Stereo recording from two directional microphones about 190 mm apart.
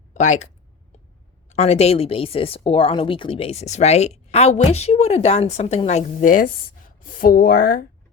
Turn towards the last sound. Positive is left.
turn(degrees=45)  # may be behind; listen again after turning